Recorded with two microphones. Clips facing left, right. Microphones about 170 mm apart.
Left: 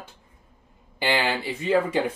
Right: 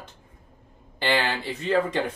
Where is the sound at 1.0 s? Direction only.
10° left (ahead or behind).